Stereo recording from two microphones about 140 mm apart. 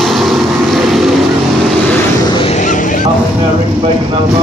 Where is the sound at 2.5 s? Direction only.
65° left (ahead or behind).